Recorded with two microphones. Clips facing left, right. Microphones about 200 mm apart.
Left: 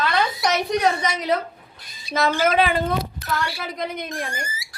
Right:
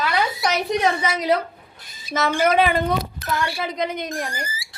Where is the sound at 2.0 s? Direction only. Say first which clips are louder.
Even; 50° right (ahead or behind).